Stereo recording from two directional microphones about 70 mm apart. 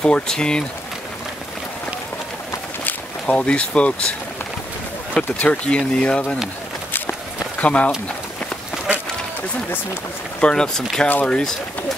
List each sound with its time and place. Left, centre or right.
0.0 s speech: centre
3.3 s speech: centre
5.1 s speech: centre
7.6 s speech: centre
10.4 s speech: centre
11.1 s speech: left